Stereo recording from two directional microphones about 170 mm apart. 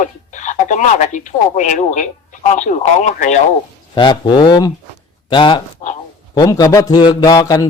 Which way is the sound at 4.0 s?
30° left (ahead or behind).